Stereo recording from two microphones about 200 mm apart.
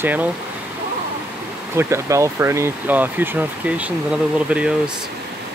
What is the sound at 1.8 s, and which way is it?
Speech, 15° right (ahead or behind).